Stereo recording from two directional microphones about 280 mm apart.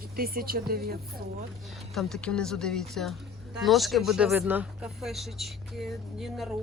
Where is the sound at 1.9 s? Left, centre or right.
Centre.